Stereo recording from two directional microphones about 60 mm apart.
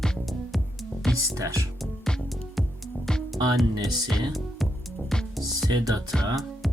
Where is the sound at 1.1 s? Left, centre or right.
Right.